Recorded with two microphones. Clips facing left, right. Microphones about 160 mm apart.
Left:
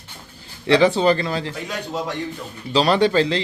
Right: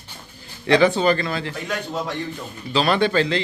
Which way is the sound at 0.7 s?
30° left (ahead or behind).